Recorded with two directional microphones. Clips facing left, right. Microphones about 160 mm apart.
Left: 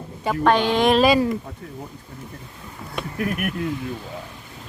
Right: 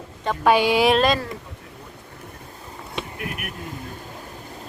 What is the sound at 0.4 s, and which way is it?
Speech, 10° right (ahead or behind).